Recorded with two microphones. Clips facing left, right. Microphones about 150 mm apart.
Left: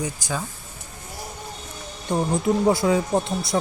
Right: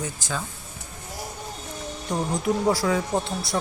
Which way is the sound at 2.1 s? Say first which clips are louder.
Left 4 dB; 25° left (ahead or behind).